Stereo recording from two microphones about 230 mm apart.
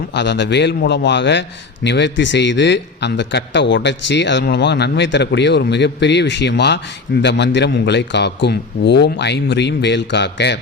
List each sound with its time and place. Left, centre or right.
0.1 s a man's voice: left